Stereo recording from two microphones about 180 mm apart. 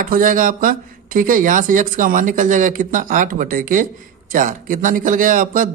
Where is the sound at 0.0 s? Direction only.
50° right (ahead or behind).